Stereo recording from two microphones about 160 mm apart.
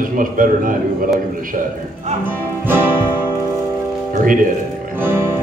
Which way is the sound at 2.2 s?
15° right (ahead or behind).